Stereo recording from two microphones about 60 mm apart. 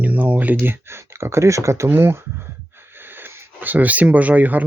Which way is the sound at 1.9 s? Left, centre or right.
Right.